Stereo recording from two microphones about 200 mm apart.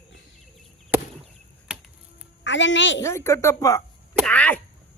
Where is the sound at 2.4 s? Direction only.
65° left (ahead or behind).